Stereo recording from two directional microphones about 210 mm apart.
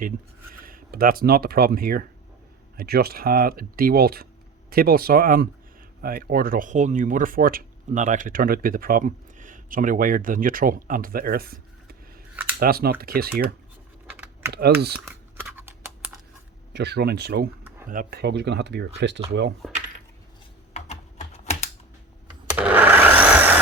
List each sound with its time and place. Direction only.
0.6 s speech: 45° right (ahead or behind)
14.1 s typing: 10° right (ahead or behind)
14.5 s speech: 50° right (ahead or behind)
14.9 s typing: 5° right (ahead or behind)
16.7 s speech: 55° right (ahead or behind)
20.7 s typing: 30° left (ahead or behind)
22.5 s wood: 10° right (ahead or behind)